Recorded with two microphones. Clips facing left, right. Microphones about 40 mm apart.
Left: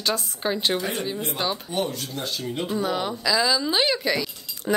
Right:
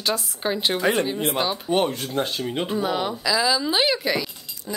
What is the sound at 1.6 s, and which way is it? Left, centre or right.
Speech, right.